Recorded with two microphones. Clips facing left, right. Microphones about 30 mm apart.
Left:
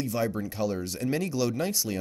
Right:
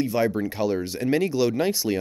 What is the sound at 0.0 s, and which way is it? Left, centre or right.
Speech, right.